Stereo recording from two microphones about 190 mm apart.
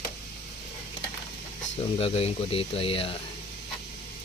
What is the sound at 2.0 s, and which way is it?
Speech, 30° left (ahead or behind).